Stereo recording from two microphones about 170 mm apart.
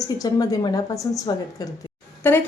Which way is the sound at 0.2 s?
20° left (ahead or behind).